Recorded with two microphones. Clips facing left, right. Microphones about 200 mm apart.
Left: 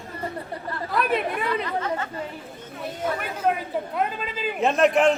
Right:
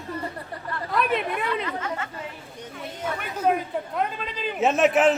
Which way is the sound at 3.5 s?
Centre (ahead or behind).